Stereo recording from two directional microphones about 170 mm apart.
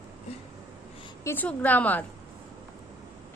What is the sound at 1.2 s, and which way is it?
Speech, 15° left (ahead or behind).